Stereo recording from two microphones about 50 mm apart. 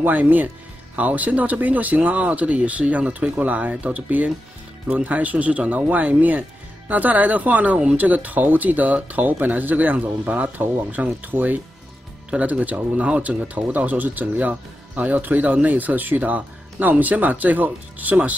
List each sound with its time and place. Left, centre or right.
0.0 s speech: right
12.4 s speech: right
13.7 s speech: right